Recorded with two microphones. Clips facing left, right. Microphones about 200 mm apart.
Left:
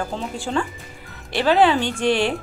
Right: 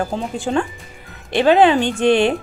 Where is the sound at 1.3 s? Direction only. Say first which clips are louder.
Right 4 dB; 20° right (ahead or behind).